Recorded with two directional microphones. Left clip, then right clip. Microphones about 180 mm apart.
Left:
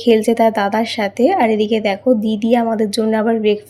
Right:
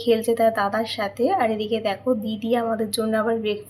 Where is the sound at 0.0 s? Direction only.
35° left (ahead or behind).